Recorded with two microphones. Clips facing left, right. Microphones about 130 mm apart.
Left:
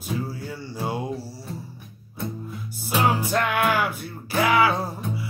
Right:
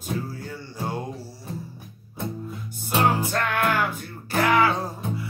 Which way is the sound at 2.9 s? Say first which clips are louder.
Even; 5° left (ahead or behind).